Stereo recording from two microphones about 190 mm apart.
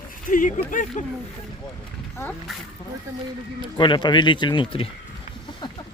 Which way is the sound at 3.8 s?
25° left (ahead or behind).